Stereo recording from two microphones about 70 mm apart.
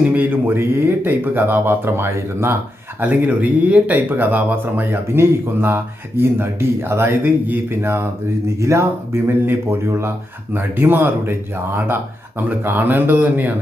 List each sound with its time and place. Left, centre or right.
0.0 s speech: right
3.0 s speech: right